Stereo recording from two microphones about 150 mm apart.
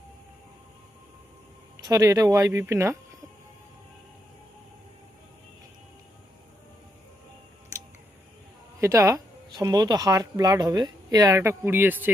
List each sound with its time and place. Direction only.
1.7 s speech: 25° right (ahead or behind)
8.8 s speech: 20° right (ahead or behind)